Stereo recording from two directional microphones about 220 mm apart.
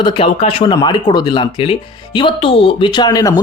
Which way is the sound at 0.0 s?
25° left (ahead or behind).